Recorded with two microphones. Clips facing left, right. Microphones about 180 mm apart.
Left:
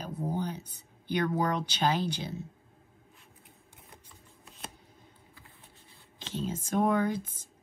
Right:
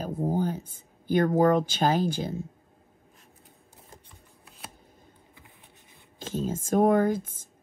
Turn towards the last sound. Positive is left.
turn(degrees=-50)  # may be behind; listen again after turning